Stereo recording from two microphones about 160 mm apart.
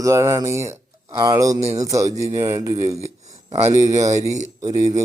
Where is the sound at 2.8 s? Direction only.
45° right (ahead or behind).